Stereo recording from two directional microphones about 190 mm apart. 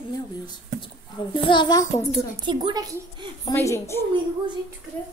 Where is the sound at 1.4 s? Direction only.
25° left (ahead or behind).